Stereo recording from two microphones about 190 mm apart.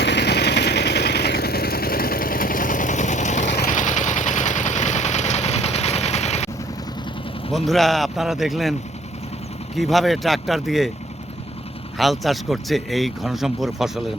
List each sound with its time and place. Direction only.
0.0 s vehicle: 65° left (ahead or behind); by 6.5 s 35° left (ahead or behind)
7.5 s speech: centre (ahead or behind)
9.7 s speech: centre (ahead or behind)
11.9 s speech: centre (ahead or behind)